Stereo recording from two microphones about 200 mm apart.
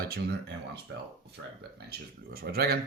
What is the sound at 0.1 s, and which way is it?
Speech, 55° right (ahead or behind).